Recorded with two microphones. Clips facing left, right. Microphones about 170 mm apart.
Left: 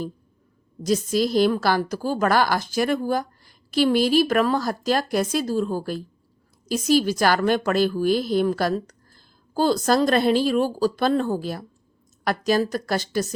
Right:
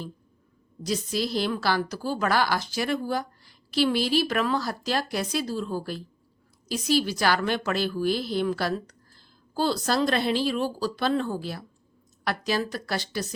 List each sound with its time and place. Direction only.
0.8 s a woman's voice: 45° left (ahead or behind)